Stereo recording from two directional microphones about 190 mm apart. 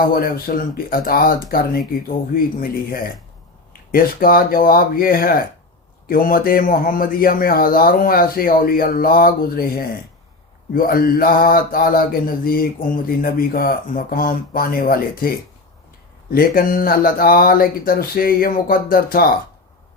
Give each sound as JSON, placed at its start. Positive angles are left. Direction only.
{"t": 0.0, "sound": "a man's voice", "side_deg": 50}
{"t": 16.3, "sound": "a man's voice", "side_deg": 50}